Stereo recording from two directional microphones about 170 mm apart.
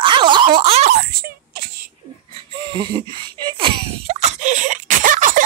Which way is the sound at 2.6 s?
25° right (ahead or behind).